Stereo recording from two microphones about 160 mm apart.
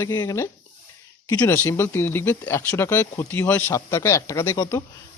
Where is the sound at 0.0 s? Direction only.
20° left (ahead or behind).